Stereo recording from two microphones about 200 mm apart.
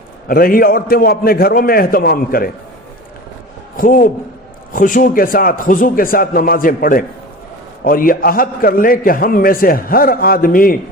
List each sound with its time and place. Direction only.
0.3 s a man's voice: 45° left (ahead or behind)
3.8 s a man's voice: 45° left (ahead or behind)